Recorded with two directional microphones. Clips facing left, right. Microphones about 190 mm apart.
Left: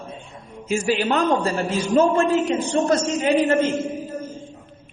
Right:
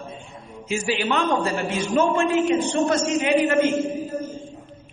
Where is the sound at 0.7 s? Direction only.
45° left (ahead or behind).